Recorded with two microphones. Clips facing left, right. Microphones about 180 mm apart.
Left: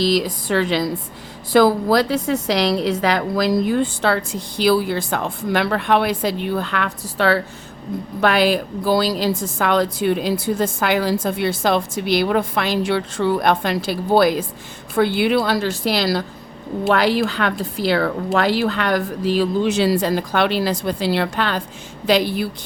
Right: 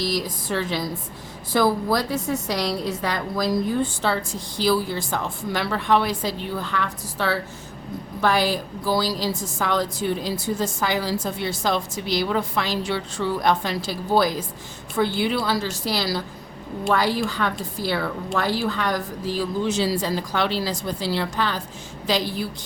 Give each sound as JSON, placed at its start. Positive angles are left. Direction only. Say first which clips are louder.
{"t": 0.0, "sound": "a woman's voice", "louder": "left 7 dB", "side_deg": 85}